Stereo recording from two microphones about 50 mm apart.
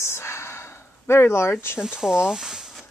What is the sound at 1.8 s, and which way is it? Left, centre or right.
Speech, centre.